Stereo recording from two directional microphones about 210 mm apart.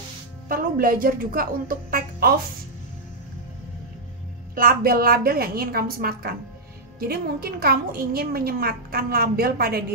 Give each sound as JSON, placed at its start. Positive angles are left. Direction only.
{"t": 0.5, "sound": "a woman's voice", "side_deg": -40}
{"t": 4.6, "sound": "a woman's voice", "side_deg": -45}